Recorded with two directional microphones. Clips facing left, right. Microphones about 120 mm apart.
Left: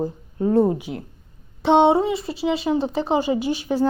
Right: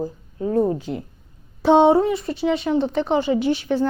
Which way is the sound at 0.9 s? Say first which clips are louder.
Right 3 dB; 90° right.